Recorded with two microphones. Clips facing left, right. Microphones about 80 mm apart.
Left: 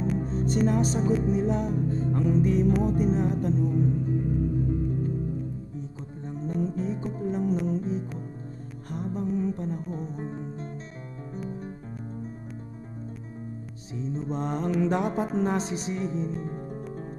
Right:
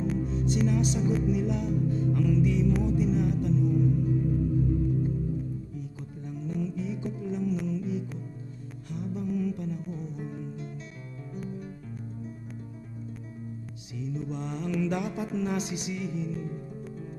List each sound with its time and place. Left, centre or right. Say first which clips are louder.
0.2 s speech: left 2 dB; left
5.8 s music: left 2 dB; left
13.9 s speech: left 4 dB; left